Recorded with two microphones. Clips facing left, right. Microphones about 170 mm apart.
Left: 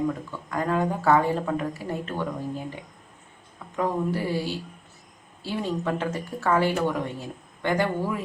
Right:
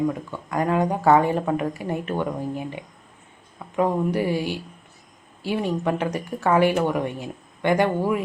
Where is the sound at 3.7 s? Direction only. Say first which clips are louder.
Right 4 dB; 15° right (ahead or behind).